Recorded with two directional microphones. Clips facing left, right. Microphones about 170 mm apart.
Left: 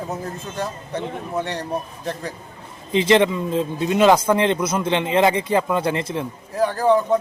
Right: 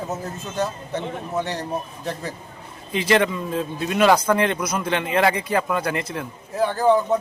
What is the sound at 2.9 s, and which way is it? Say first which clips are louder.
Speech: left 4 dB; 25° left (ahead or behind).